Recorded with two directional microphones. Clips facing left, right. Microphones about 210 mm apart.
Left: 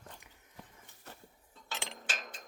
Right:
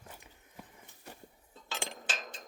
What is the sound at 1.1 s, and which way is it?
Dishes, 15° right (ahead or behind).